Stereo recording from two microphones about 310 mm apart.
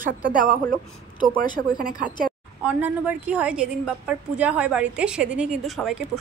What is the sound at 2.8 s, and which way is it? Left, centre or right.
A woman's voice, centre.